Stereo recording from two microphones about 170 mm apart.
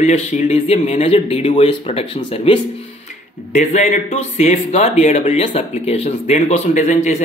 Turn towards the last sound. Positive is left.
turn(degrees=45)  # may be behind; listen again after turning